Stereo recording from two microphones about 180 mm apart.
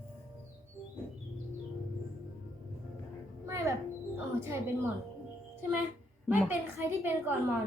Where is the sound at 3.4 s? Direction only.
15° right (ahead or behind).